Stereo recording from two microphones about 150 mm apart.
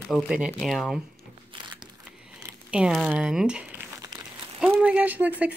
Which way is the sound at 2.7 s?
5° right (ahead or behind).